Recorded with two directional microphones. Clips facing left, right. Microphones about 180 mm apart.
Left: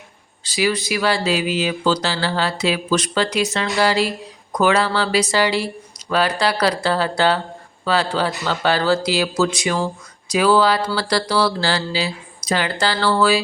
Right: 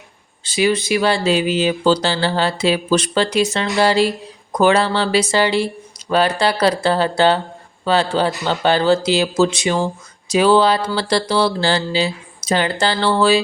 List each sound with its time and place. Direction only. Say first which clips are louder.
0.4 s speech: right 3 dB; 25° right (ahead or behind)